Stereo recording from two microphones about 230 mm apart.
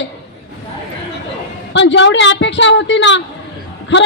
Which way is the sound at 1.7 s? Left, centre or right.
Left.